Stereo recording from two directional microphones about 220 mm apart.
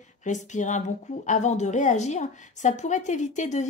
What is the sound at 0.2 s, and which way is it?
Speech, 35° left (ahead or behind).